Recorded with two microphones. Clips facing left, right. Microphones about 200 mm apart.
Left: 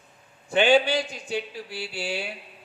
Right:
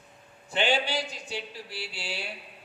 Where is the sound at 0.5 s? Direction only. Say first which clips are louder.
Left 7 dB; 55° left (ahead or behind).